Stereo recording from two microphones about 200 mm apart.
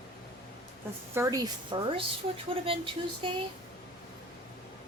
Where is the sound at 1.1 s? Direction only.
15° right (ahead or behind).